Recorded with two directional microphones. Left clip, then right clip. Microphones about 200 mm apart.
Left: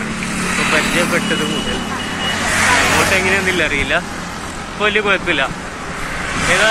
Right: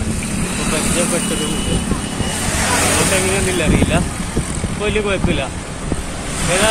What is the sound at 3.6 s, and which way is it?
Speech, 5° right (ahead or behind).